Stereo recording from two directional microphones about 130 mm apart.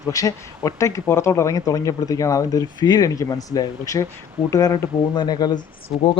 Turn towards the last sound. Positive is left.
turn(degrees=-5)  # may be behind; listen again after turning